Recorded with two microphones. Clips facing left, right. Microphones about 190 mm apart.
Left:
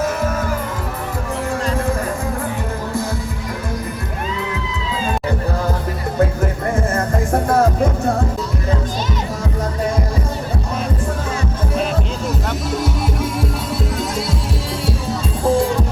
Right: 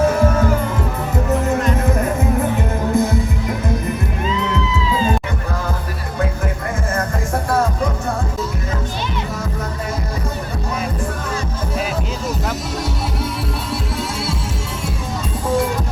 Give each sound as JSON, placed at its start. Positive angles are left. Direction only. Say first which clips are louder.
{"t": 2.9, "sound": "music", "louder": "right 7 dB", "side_deg": -20}